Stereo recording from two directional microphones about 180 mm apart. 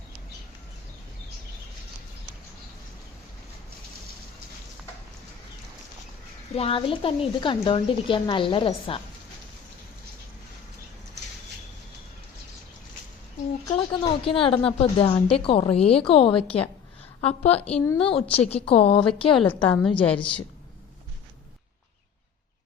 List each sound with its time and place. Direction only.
6.6 s a woman's voice: 30° left (ahead or behind)
13.7 s a woman's voice: 30° left (ahead or behind)
19.4 s a woman's voice: 10° left (ahead or behind)